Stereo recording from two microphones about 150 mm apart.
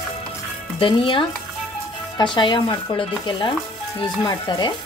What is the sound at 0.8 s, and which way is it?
Speech, 35° left (ahead or behind).